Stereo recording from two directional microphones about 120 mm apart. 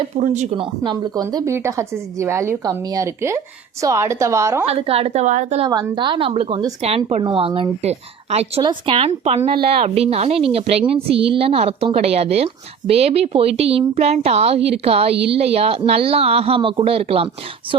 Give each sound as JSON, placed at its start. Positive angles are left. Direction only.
{"t": 0.1, "sound": "a woman's voice", "side_deg": -90}
{"t": 0.9, "sound": "speech", "side_deg": -35}
{"t": 1.5, "sound": "a woman's voice", "side_deg": -20}
{"t": 4.6, "sound": "a woman's voice", "side_deg": -55}
{"t": 5.2, "sound": "a woman's voice", "side_deg": -90}
{"t": 5.6, "sound": "a woman's voice", "side_deg": -40}
{"t": 8.6, "sound": "a woman's voice", "side_deg": -50}